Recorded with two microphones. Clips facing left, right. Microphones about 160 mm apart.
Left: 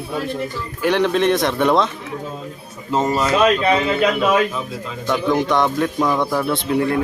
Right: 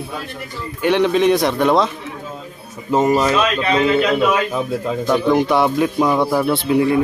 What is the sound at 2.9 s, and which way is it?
Speech, 15° right (ahead or behind).